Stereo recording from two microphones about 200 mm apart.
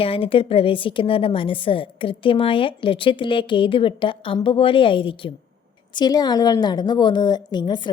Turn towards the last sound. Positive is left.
turn(degrees=20)  # may be behind; listen again after turning